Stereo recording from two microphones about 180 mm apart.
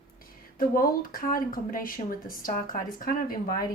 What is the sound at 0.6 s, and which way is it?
Speech, 50° left (ahead or behind).